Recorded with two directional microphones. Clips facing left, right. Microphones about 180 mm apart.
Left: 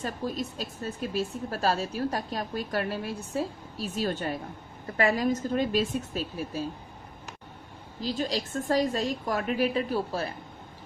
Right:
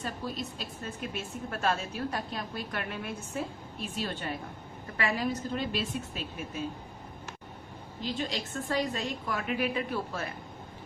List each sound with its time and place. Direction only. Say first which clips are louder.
0.0 s a woman's voice: left 4 dB; 40° left (ahead or behind)
8.0 s a woman's voice: left 4 dB; 40° left (ahead or behind)